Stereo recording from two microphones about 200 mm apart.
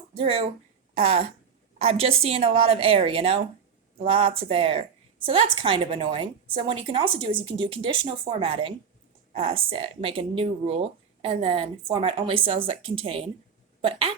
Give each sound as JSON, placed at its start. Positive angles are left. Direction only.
{"t": 0.1, "sound": "speech", "side_deg": -30}